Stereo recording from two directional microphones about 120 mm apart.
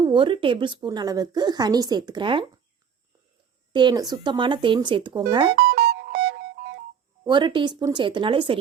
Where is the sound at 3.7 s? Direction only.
35° right (ahead or behind).